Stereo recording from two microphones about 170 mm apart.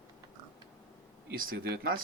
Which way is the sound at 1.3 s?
60° right (ahead or behind).